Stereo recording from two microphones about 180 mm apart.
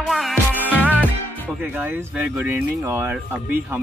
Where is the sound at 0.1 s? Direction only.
Centre (ahead or behind).